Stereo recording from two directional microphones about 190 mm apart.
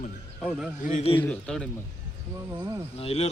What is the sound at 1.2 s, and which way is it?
Speech, 5° left (ahead or behind).